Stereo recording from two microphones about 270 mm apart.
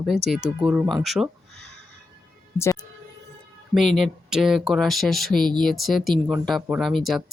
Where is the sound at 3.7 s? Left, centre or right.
Centre.